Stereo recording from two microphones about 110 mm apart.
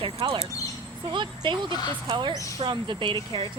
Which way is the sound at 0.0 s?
55° right (ahead or behind).